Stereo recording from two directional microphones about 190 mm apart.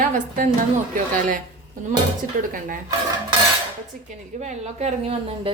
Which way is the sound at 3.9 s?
45° right (ahead or behind).